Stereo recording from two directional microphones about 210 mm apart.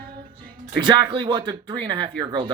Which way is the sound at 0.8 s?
20° right (ahead or behind).